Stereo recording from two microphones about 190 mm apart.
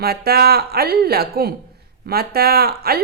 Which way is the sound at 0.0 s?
55° right (ahead or behind).